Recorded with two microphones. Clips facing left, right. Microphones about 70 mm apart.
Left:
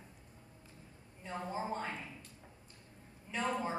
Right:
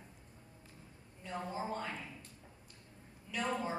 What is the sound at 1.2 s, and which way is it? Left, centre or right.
Speech, left.